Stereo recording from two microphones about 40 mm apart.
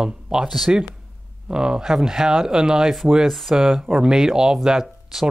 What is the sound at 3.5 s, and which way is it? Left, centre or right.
Speech, centre.